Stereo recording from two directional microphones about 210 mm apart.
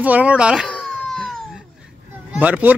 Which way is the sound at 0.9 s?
5° left (ahead or behind).